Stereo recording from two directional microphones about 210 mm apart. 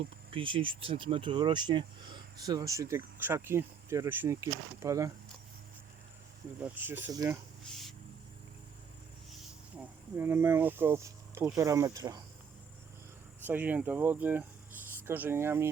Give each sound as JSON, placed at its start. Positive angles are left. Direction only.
{"t": 0.3, "sound": "speech", "side_deg": -25}
{"t": 6.6, "sound": "speech", "side_deg": -10}
{"t": 9.7, "sound": "speech", "side_deg": -10}
{"t": 13.5, "sound": "speech", "side_deg": -10}